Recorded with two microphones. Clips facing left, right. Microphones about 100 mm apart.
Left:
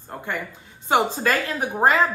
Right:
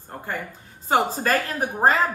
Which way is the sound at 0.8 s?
40° right (ahead or behind).